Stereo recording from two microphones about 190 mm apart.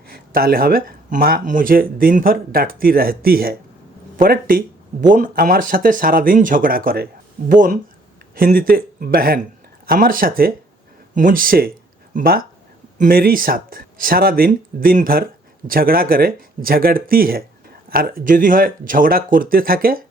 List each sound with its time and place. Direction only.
0.1 s speech: 50° right (ahead or behind)